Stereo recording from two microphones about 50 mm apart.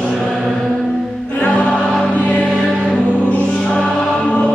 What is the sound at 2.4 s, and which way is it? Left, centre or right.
Choir, centre.